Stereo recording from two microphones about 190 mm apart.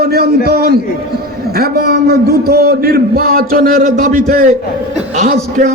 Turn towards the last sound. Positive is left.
turn(degrees=-40)  # may be behind; listen again after turning